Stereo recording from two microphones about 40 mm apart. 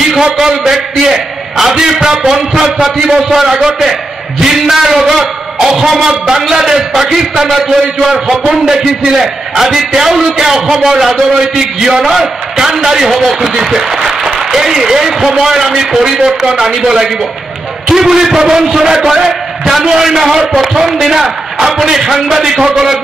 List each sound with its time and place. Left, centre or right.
0.2 s a man's voice: centre
16.1 s a man's voice: centre